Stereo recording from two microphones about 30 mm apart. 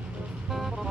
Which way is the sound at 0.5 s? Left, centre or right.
Centre.